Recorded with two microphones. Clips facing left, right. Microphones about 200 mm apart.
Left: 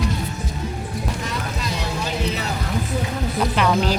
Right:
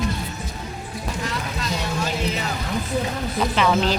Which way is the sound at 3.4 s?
10° left (ahead or behind).